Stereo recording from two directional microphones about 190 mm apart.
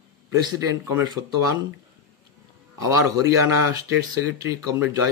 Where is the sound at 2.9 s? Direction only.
15° right (ahead or behind).